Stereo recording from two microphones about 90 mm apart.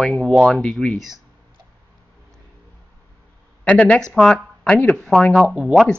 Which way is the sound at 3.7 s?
15° left (ahead or behind).